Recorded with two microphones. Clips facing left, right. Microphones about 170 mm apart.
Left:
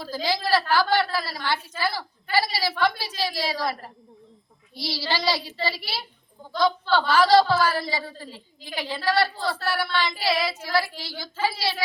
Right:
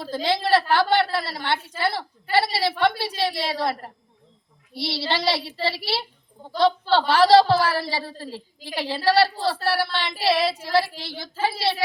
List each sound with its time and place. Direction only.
0.0 s a woman's voice: 25° right (ahead or behind)
4.9 s a woman's voice: 25° right (ahead or behind)